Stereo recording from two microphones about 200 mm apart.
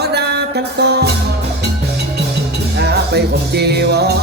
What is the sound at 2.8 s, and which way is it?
Music, 55° right (ahead or behind).